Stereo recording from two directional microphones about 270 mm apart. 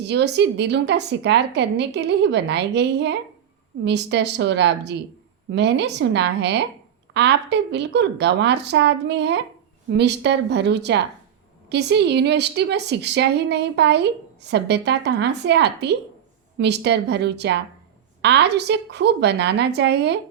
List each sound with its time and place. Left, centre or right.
0.0 s a woman's voice: right